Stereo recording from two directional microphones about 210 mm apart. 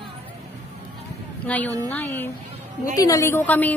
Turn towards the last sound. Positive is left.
turn(degrees=10)  # may be behind; listen again after turning